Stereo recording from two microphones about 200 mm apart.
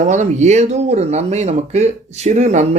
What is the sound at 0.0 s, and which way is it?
Speech, 35° right (ahead or behind).